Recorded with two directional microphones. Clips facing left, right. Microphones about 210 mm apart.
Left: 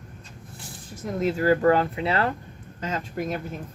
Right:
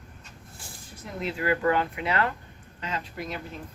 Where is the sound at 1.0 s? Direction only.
45° left (ahead or behind).